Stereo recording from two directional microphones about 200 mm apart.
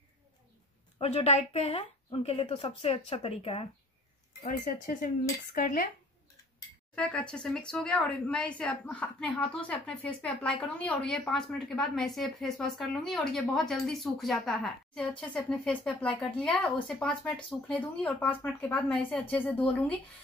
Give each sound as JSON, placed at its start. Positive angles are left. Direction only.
{"t": 0.9, "sound": "a woman's voice", "side_deg": 30}
{"t": 4.4, "sound": "speech", "side_deg": 40}
{"t": 7.0, "sound": "a woman's voice", "side_deg": 5}